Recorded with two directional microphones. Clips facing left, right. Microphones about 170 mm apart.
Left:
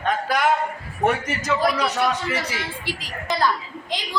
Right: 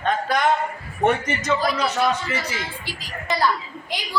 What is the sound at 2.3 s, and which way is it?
Speech, 65° left (ahead or behind).